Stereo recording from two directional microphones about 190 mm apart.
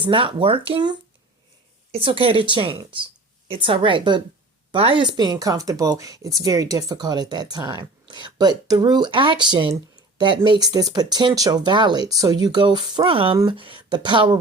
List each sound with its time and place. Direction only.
0.0 s speech: 25° right (ahead or behind)